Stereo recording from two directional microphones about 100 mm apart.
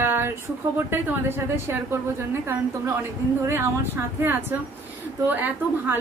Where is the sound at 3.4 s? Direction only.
25° right (ahead or behind).